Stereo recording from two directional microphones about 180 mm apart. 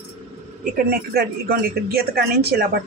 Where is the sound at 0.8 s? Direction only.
60° right (ahead or behind).